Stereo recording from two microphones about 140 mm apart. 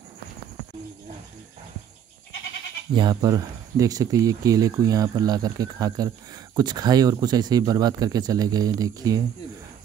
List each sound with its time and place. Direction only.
3.0 s speech: 30° right (ahead or behind)